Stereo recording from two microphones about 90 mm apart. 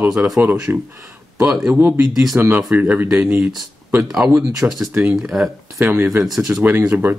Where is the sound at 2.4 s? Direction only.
20° right (ahead or behind).